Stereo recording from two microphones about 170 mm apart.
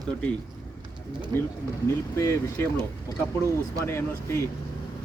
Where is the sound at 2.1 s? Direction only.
15° left (ahead or behind).